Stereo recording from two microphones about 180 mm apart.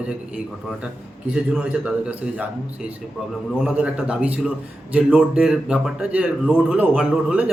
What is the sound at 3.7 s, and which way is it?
A man's voice, 5° right (ahead or behind).